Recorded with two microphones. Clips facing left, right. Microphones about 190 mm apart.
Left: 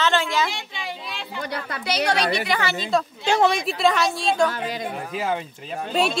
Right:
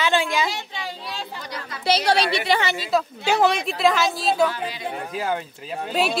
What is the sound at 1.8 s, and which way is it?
Speech, 30° right (ahead or behind).